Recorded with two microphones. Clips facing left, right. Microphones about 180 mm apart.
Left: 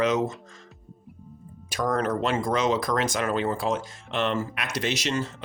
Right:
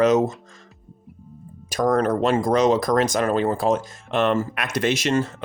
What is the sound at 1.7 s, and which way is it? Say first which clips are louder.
Speech: right 6 dB; 40° right (ahead or behind).